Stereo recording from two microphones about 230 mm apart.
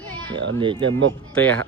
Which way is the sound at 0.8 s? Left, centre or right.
Right.